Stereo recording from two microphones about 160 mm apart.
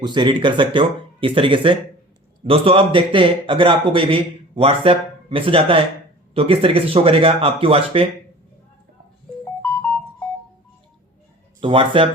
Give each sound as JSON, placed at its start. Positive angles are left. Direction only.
{"t": 0.0, "sound": "a man's voice", "side_deg": -30}
{"t": 9.6, "sound": "music", "side_deg": 10}
{"t": 11.6, "sound": "a man's voice", "side_deg": -35}